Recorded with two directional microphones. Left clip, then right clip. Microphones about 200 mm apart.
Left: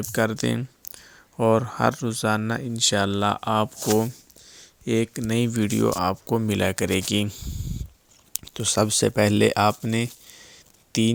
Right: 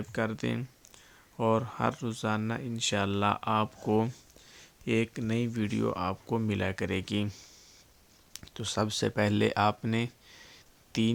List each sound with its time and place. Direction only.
0.0 s speech: 35° left (ahead or behind)
4.0 s a sound: 15° left (ahead or behind); by 5.4 s 30° left (ahead or behind)
5.4 s speech: 45° left (ahead or behind); by 11.1 s 25° left (ahead or behind)